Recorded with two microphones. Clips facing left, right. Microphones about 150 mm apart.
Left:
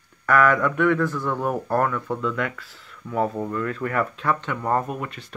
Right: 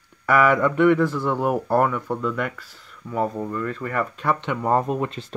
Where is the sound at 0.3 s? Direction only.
15° right (ahead or behind).